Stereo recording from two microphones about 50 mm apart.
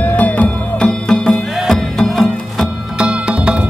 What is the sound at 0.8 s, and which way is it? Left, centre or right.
Music, centre.